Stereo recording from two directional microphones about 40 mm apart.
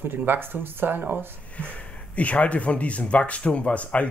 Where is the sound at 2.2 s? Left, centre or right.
Left.